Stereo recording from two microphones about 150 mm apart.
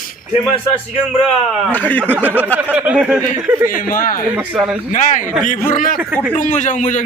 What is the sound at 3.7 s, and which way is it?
Speech, 70° left (ahead or behind).